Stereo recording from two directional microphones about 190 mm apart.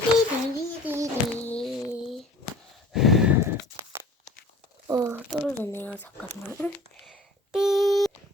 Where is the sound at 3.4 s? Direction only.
15° right (ahead or behind).